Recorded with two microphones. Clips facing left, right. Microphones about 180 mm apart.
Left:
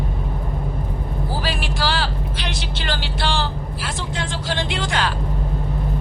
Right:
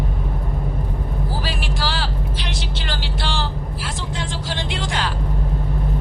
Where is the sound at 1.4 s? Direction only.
65° left (ahead or behind).